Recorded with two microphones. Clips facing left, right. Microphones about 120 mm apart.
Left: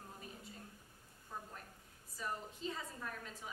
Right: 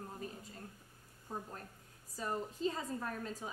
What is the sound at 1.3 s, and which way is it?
A woman's voice, 35° right (ahead or behind).